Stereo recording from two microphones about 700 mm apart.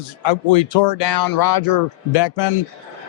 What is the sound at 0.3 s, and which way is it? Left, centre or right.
Speech, left.